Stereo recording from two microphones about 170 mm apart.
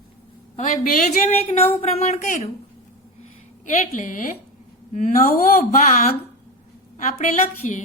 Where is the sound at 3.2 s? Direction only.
50° left (ahead or behind).